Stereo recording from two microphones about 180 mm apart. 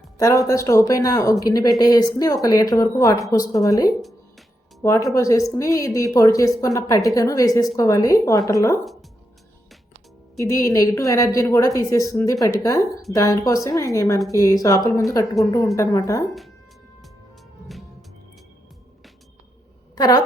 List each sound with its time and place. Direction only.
0.2 s a woman's voice: 20° left (ahead or behind)
8.8 s speech: centre (ahead or behind)
10.3 s a woman's voice: 15° left (ahead or behind)
20.0 s speech: 20° left (ahead or behind)